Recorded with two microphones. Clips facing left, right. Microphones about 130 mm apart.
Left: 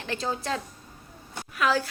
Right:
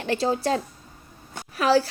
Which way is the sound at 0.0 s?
35° right (ahead or behind).